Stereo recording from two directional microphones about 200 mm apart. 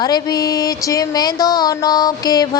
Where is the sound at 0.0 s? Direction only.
20° left (ahead or behind).